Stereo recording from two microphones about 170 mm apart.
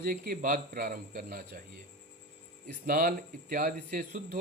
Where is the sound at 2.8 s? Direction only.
55° right (ahead or behind).